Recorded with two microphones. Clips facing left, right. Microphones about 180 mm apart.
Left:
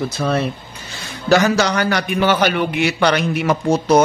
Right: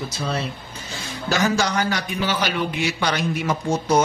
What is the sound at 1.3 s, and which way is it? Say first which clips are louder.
A man's voice: left 6 dB; 70° left (ahead or behind).